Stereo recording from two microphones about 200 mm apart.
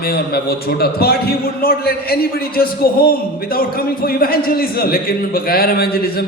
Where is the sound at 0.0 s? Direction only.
50° left (ahead or behind).